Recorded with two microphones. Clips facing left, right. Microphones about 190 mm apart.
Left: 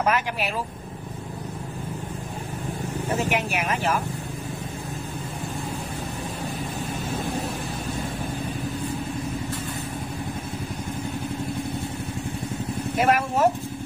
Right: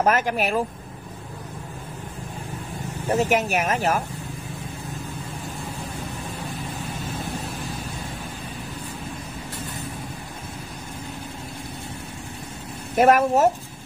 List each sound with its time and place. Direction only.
0.0 s speech: 45° right (ahead or behind)
3.2 s speech: 40° right (ahead or behind)
12.9 s speech: 45° right (ahead or behind)